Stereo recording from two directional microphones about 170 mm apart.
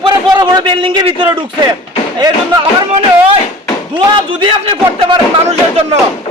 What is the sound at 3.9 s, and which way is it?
A man's voice, 30° right (ahead or behind).